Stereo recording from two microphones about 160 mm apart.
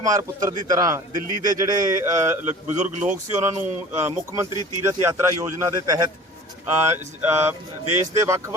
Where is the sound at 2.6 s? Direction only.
50° right (ahead or behind).